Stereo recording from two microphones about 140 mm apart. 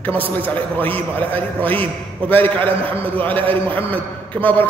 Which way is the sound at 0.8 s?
15° left (ahead or behind).